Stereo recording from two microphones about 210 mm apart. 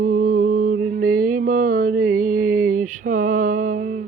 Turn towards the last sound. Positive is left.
turn(degrees=-40)  # may be behind; listen again after turning